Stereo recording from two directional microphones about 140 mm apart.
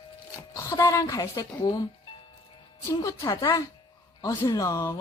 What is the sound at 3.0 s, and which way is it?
Speech, 25° left (ahead or behind).